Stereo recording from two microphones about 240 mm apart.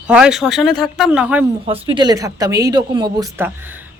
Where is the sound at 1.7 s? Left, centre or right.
Right.